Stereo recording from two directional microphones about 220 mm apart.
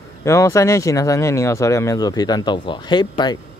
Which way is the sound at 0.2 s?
15° left (ahead or behind).